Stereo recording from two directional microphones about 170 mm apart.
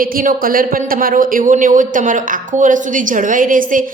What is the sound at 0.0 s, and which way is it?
A woman's voice, 55° right (ahead or behind).